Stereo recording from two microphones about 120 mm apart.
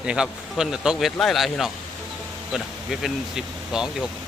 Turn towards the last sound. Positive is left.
turn(degrees=-5)  # may be behind; listen again after turning